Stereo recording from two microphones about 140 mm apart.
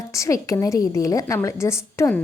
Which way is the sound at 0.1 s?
20° left (ahead or behind).